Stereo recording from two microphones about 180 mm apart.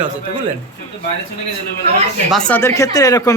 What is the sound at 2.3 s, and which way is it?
Speech, 5° left (ahead or behind).